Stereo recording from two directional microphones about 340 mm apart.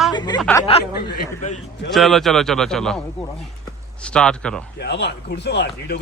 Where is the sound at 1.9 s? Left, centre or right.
Centre.